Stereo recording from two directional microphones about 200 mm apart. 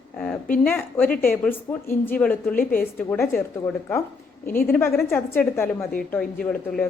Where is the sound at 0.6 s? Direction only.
10° left (ahead or behind).